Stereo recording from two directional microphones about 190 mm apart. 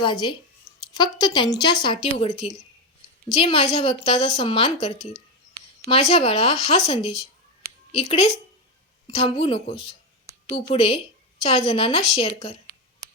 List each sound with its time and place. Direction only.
0.0 s a woman's voice: 25° left (ahead or behind)